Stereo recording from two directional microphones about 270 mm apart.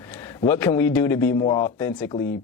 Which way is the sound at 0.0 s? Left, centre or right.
Centre.